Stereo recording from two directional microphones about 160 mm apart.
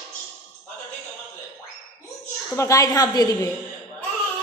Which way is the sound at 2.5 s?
20° left (ahead or behind).